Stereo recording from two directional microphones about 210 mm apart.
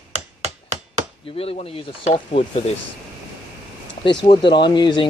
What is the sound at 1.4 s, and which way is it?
Speech, 30° left (ahead or behind).